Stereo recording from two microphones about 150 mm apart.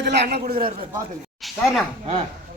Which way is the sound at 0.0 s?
90° right.